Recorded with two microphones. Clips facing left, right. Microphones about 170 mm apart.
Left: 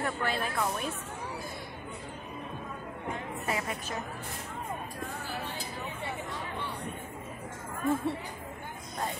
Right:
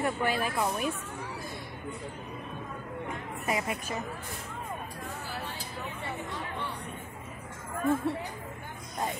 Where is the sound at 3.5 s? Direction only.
10° right (ahead or behind).